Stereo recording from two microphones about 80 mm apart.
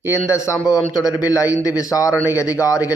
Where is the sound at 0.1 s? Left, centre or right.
Left.